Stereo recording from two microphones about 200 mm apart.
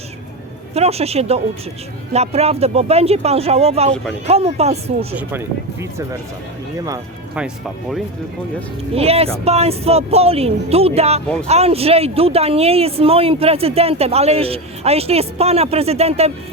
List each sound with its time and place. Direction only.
0.7 s speech: 30° right (ahead or behind)
5.1 s speech: 10° right (ahead or behind)
7.3 s speech: centre (ahead or behind)
9.0 s speech: 30° right (ahead or behind)